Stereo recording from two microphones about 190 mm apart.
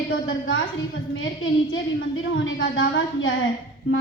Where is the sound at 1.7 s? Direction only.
90° left.